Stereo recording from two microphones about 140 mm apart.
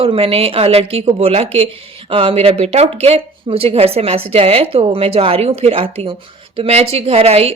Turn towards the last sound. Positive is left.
turn(degrees=-45)  # may be behind; listen again after turning